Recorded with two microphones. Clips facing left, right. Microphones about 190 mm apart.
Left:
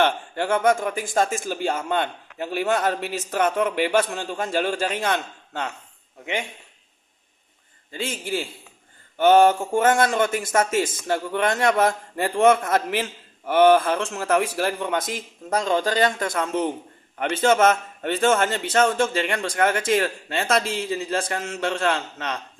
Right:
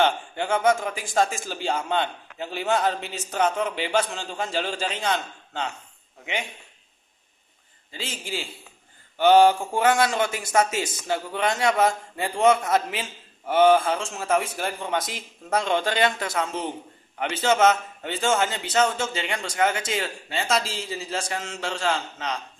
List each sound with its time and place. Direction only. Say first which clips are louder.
0.0 s a man's voice: left 1 dB; 60° left (ahead or behind)
7.9 s a man's voice: left 6 dB; 50° left (ahead or behind)
15.4 s a man's voice: left 2 dB; 40° left (ahead or behind); by 22.4 s 60° left (ahead or behind)